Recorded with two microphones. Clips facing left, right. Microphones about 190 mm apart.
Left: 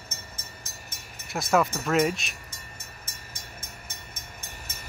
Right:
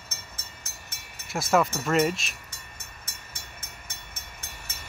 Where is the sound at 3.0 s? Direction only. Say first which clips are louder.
Left 1 dB; 65° right (ahead or behind).